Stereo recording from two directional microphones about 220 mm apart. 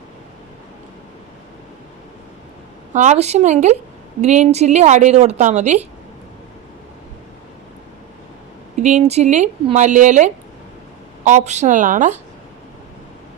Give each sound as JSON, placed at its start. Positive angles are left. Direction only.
{"t": 2.9, "sound": "a woman's voice", "side_deg": -30}
{"t": 8.8, "sound": "a woman's voice", "side_deg": -30}